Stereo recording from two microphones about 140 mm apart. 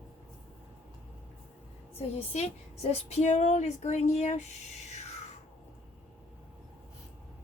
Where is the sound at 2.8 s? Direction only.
50° left (ahead or behind).